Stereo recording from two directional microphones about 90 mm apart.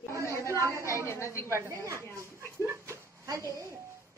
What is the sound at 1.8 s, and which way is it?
Speech, 35° right (ahead or behind).